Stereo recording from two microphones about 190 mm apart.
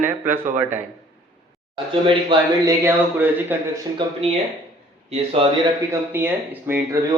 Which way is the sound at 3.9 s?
30° right (ahead or behind).